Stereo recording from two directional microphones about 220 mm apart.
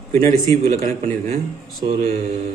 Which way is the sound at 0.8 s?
30° right (ahead or behind).